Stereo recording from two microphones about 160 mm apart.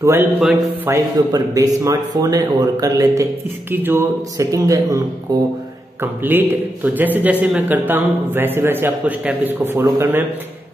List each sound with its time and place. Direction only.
0.0 s speech: 15° right (ahead or behind)
5.9 s speech: 10° right (ahead or behind)